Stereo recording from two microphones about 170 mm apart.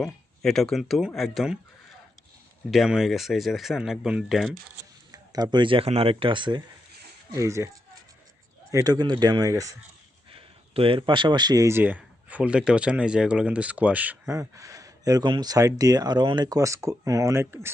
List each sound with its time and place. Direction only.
0.0 s speech: centre (ahead or behind)
2.6 s speech: centre (ahead or behind)
5.1 s speech: 20° right (ahead or behind)
8.7 s speech: 25° right (ahead or behind)
10.3 s speech: 35° right (ahead or behind); by 17.7 s 15° right (ahead or behind)